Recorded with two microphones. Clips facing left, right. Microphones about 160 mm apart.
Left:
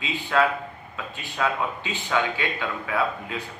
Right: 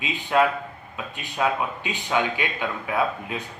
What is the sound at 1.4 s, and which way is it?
Speech, 20° right (ahead or behind).